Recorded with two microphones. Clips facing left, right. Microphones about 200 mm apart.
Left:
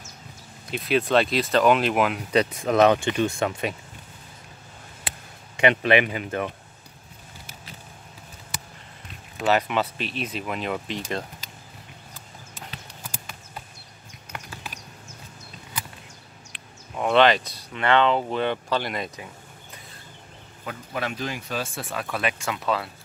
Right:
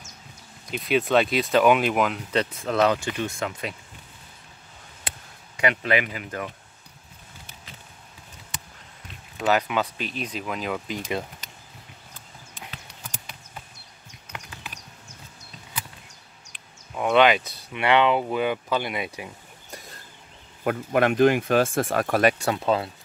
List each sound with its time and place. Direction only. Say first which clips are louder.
0.7 s speech: even; centre (ahead or behind)
2.5 s speech: left 4 dB; 15° left (ahead or behind)
5.6 s speech: left 4 dB; 25° left (ahead or behind)
9.4 s speech: left 1 dB; centre (ahead or behind)
16.9 s speech: even; 5° right (ahead or behind)
20.6 s speech: right 9 dB; 60° right (ahead or behind); by 22.8 s 25° right (ahead or behind)